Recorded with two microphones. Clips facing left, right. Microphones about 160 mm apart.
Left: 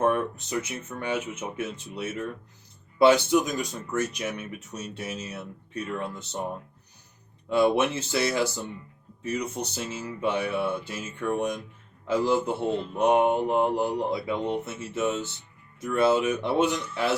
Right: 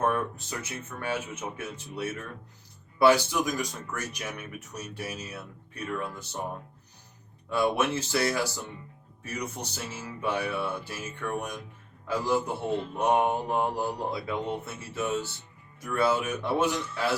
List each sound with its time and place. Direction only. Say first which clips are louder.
0.0 s speech: left 3 dB; 20° left (ahead or behind)
7.5 s speech: left 4 dB; 20° left (ahead or behind)